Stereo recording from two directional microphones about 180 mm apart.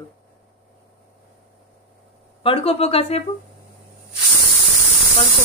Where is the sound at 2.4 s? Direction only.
30° left (ahead or behind).